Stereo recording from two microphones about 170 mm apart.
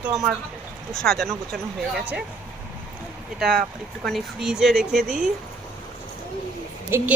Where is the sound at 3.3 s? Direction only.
Centre (ahead or behind).